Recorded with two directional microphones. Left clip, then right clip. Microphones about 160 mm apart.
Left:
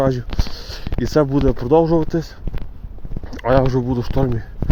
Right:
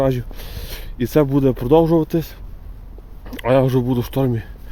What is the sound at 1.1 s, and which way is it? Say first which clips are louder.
Speech: even; 25° right (ahead or behind).